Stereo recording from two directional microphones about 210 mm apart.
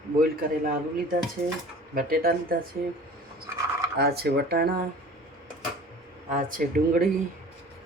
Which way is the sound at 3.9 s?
50° right (ahead or behind).